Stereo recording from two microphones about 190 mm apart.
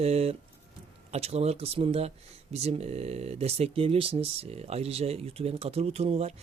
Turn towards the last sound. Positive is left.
turn(degrees=-35)  # may be behind; listen again after turning